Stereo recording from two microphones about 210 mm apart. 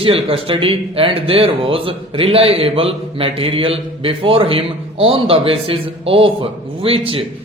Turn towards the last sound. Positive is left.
turn(degrees=-25)  # may be behind; listen again after turning